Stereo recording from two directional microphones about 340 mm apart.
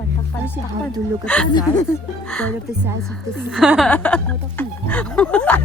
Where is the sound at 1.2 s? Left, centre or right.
Centre.